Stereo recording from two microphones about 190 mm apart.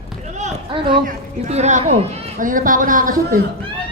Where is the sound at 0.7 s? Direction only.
25° right (ahead or behind).